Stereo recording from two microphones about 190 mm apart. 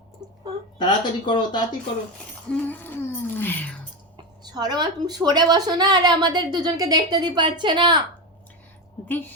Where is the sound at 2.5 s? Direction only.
10° left (ahead or behind).